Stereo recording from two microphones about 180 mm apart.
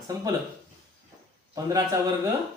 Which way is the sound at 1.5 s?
20° right (ahead or behind).